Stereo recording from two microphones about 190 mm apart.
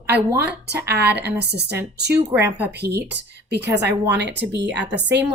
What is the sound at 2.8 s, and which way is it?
A woman's voice, 60° right (ahead or behind).